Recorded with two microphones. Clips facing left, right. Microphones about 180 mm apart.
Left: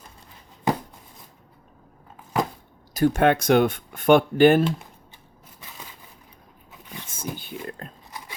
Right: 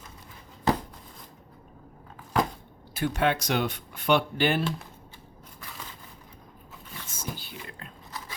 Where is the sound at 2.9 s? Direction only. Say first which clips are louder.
Left 7 dB; 45° left (ahead or behind).